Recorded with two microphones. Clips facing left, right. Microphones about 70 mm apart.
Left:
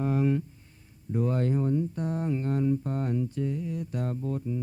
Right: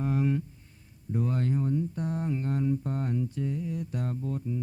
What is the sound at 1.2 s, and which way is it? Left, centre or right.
Speech, centre.